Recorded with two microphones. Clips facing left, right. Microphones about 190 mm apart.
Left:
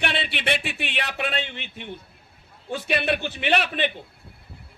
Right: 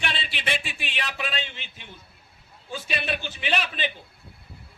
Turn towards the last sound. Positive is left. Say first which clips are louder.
# left 5 dB
turn(degrees=60)  # may be behind; listen again after turning